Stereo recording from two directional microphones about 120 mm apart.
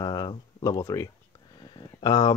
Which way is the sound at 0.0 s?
35° left (ahead or behind).